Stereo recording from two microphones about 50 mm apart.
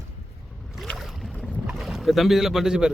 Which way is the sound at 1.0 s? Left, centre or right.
Centre.